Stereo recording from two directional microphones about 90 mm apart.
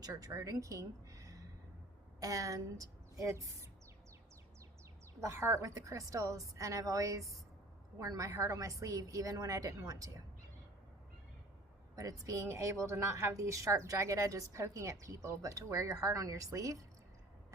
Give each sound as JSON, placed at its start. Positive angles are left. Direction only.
{"t": 0.0, "sound": "a woman's voice", "side_deg": -40}
{"t": 5.2, "sound": "a woman's voice", "side_deg": -30}
{"t": 11.9, "sound": "a woman's voice", "side_deg": -40}